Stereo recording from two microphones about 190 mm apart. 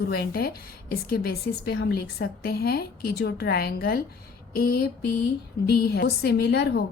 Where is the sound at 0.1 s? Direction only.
55° left (ahead or behind).